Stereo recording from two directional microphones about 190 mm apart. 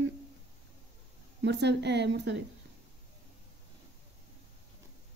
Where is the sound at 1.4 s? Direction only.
65° right (ahead or behind).